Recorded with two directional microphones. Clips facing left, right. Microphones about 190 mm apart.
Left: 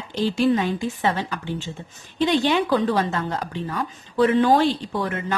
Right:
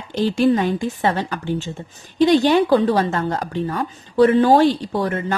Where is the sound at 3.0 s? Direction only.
45° right (ahead or behind).